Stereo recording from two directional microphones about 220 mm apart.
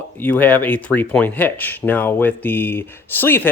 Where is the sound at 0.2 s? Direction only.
10° left (ahead or behind).